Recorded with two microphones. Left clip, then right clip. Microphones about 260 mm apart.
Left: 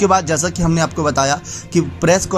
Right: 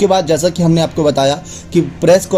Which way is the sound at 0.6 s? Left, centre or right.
Left.